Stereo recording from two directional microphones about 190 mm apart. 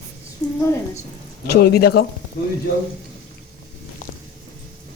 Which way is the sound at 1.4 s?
55° left (ahead or behind).